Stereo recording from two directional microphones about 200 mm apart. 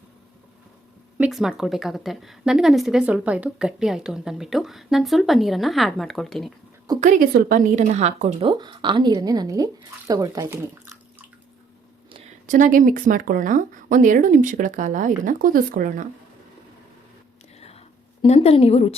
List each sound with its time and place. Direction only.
1.2 s a woman's voice: centre (ahead or behind)
7.0 s speech: 40° right (ahead or behind); by 10.6 s 15° right (ahead or behind)
12.5 s speech: 40° right (ahead or behind)
17.6 s a sound: 30° left (ahead or behind)